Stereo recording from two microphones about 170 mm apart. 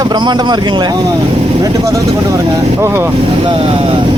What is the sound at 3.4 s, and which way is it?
Speech, 30° right (ahead or behind).